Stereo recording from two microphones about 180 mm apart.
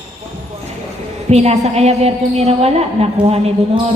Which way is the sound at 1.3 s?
35° right (ahead or behind).